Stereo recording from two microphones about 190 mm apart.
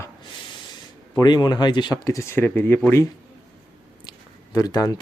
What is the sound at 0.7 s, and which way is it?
Speech, 20° left (ahead or behind).